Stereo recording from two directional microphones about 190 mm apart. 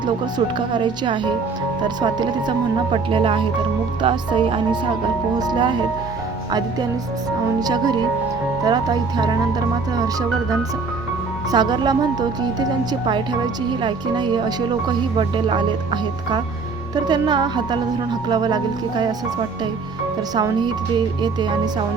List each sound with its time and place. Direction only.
0.3 s speech: 25° right (ahead or behind)
2.9 s speech: 30° right (ahead or behind)
7.6 s speech: 20° right (ahead or behind)
11.5 s speech: 20° right (ahead or behind)
16.9 s speech: 20° right (ahead or behind)
20.3 s speech: 20° right (ahead or behind)